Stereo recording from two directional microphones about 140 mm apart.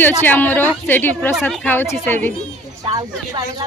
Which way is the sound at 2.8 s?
30° right (ahead or behind).